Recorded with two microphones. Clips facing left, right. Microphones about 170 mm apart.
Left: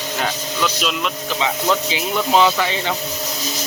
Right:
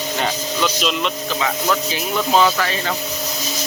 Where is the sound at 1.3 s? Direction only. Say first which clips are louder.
Left 2 dB; 20° left (ahead or behind).